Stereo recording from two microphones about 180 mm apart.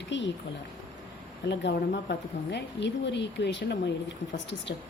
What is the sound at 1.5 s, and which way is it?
Speech, 75° left (ahead or behind).